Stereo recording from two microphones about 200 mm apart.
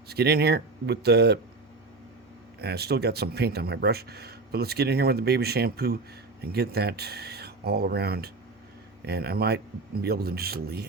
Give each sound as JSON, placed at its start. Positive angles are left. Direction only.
{"t": 0.1, "sound": "speech", "side_deg": -50}
{"t": 2.6, "sound": "speech", "side_deg": -55}